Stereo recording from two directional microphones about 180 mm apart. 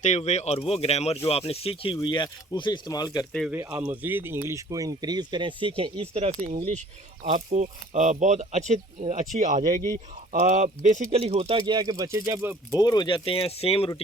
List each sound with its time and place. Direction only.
0.0 s speech: 40° left (ahead or behind); by 3.2 s 20° left (ahead or behind)
3.5 s speech: 10° right (ahead or behind); by 11.5 s 35° right (ahead or behind)
11.5 s speech: 25° right (ahead or behind)
12.7 s speech: 20° left (ahead or behind)